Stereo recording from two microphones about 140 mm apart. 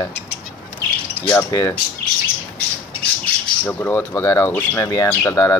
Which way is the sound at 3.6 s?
10° left (ahead or behind).